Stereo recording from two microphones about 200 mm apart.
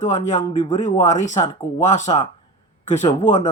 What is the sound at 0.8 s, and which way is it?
Speech, 35° left (ahead or behind).